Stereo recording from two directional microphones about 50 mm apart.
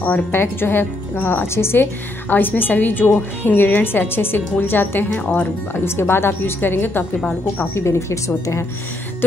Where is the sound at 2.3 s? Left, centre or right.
Left.